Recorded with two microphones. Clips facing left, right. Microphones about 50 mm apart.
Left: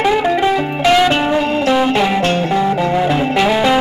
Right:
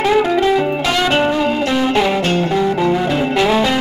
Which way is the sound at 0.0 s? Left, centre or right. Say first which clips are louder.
Even; centre.